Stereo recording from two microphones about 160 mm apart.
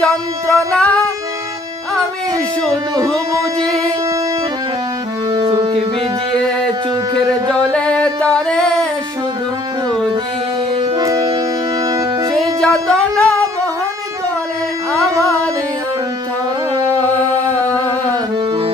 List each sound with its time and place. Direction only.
0.0 s music: 5° left (ahead or behind)
2.6 s speech: 5° left (ahead or behind)
7.7 s music: 5° left (ahead or behind)
10.8 s music: 25° right (ahead or behind)
12.5 s music: 5° left (ahead or behind)